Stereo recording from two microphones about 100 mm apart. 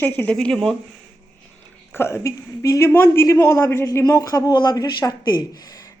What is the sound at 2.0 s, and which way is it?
A woman's voice, 25° left (ahead or behind).